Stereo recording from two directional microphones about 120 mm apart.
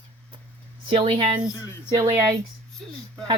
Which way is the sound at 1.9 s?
25° right (ahead or behind).